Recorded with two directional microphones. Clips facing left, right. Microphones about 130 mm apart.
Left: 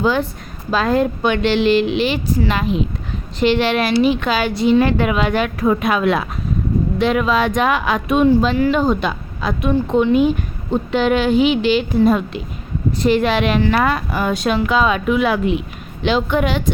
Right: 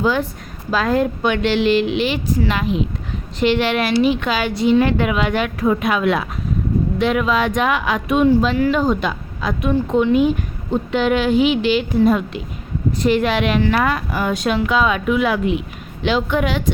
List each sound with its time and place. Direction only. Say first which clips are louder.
0.0 s a woman's voice: left 1 dB; 30° left (ahead or behind)